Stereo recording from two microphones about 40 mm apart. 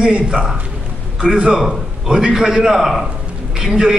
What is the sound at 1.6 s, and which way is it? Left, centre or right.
A man's voice, centre.